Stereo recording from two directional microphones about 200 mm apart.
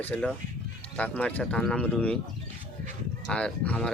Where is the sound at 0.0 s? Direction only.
5° left (ahead or behind).